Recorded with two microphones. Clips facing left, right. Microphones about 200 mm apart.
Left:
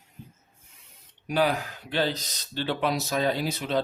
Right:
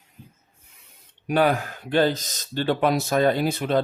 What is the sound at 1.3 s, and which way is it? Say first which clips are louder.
Speech: right 4 dB; 50° right (ahead or behind).